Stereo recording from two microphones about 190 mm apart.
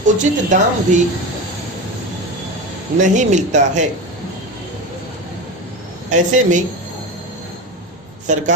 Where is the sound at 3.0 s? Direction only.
40° right (ahead or behind).